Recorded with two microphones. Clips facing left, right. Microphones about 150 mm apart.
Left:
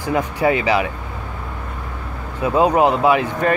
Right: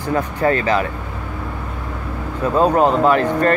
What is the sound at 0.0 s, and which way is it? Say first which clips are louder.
Speech: even; 10° left (ahead or behind).